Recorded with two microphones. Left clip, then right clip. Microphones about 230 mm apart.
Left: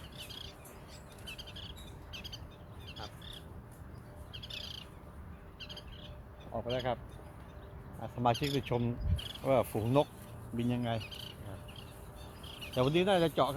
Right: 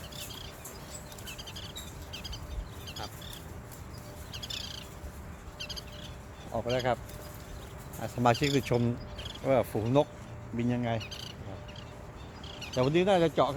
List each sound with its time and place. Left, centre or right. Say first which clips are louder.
2.1 s a sound: right 3 dB; left
4.3 s bird: right 6 dB; right
4.5 s bird: right 3 dB; centre
6.5 s speech: right 5 dB; centre
8.0 s speech: right 5 dB; centre
9.4 s speech: right 3 dB; centre
11.0 s bird: right 4 dB; right
12.7 s speech: right 3 dB; left